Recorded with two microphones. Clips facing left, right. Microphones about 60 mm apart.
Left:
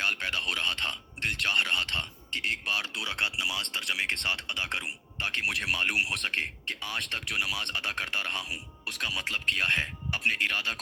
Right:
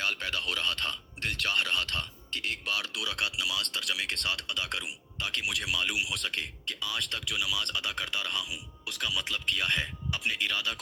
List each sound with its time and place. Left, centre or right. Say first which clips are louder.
0.0 s speech: left 2 dB; left